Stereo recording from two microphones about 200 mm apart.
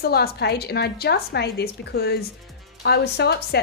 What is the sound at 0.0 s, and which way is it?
A woman's voice, 50° left (ahead or behind).